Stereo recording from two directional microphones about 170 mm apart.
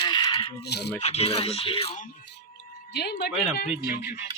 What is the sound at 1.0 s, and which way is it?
Speech, 40° left (ahead or behind).